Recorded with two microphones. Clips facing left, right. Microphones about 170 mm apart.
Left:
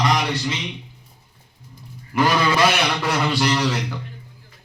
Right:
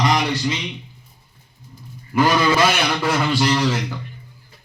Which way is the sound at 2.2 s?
Centre (ahead or behind).